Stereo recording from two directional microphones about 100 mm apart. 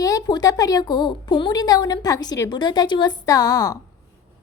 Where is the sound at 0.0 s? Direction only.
35° left (ahead or behind).